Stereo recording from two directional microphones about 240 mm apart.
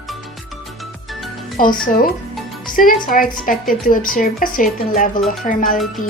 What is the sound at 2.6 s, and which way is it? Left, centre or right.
Music, left.